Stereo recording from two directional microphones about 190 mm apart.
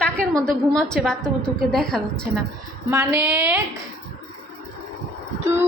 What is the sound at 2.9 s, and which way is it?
Speech, 15° right (ahead or behind).